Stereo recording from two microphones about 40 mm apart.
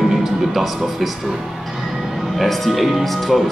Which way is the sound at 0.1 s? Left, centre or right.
Centre.